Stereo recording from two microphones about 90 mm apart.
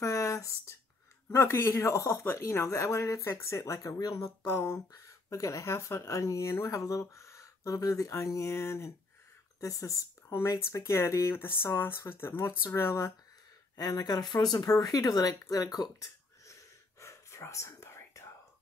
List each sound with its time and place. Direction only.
0.0 s a sound: 35° left (ahead or behind)
1.3 s speech: 30° left (ahead or behind)
13.7 s speech: 45° left (ahead or behind)
17.0 s whispering: 30° left (ahead or behind)